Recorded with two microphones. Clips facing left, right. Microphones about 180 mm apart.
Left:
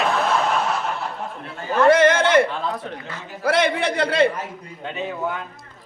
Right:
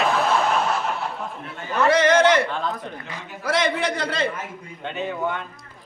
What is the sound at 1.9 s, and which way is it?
Speech, 55° left (ahead or behind).